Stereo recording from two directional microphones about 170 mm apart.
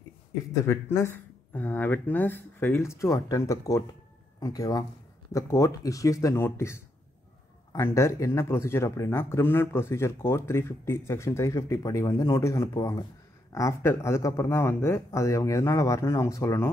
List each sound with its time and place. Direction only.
0.5 s speech: 15° left (ahead or behind)